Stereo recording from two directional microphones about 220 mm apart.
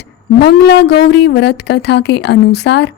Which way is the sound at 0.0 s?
50° left (ahead or behind).